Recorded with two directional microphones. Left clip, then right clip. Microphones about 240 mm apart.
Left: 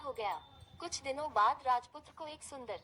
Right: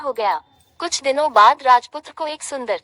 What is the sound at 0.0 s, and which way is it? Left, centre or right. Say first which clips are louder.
A woman's voice: right 18 dB; right.